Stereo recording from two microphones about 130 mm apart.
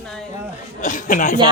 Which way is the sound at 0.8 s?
80° left.